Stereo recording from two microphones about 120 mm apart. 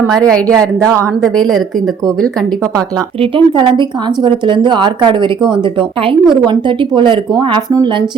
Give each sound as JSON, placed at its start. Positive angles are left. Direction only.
{"t": 0.8, "sound": "speech", "side_deg": -25}
{"t": 1.2, "sound": "a woman's voice", "side_deg": 5}
{"t": 3.2, "sound": "speech", "side_deg": -45}